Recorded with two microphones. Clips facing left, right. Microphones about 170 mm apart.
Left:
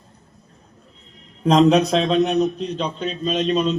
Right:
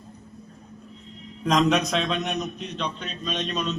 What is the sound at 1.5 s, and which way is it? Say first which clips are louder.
A man's voice: left 7 dB; 30° left (ahead or behind).